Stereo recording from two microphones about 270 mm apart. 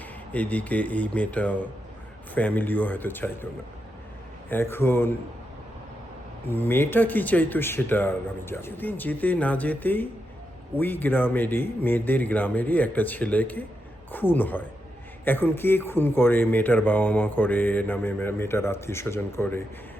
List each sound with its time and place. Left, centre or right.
0.3 s speech: centre
4.4 s speech: centre
6.5 s speech: centre